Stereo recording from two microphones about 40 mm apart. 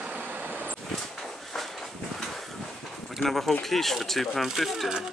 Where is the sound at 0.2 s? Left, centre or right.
Right.